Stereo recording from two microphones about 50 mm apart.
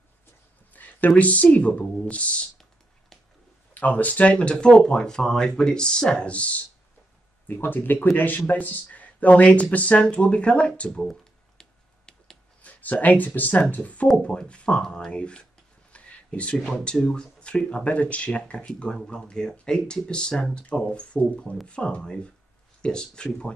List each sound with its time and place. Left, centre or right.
0.7 s speech: left
3.7 s speech: left
7.4 s speech: left; by 11.6 s centre
12.6 s speech: left
14.2 s speech: left
15.9 s a sound: left
16.8 s speech: centre